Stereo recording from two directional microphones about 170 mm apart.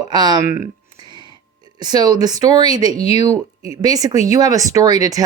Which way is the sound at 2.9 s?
35° left (ahead or behind).